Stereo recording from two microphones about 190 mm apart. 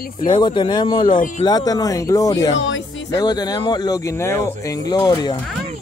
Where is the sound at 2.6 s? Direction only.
75° left (ahead or behind).